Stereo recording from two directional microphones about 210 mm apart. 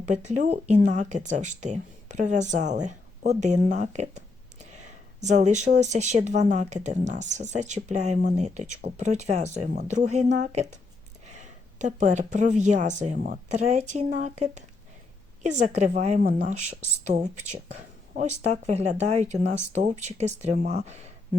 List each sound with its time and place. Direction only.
0.1 s speech: 35° right (ahead or behind)